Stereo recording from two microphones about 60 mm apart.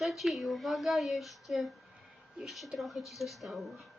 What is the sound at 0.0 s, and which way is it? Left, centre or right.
Speech, centre.